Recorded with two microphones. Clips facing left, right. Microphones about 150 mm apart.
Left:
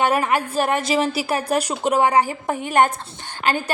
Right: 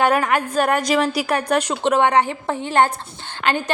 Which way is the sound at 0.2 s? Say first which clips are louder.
Right 1 dB; 30° left (ahead or behind).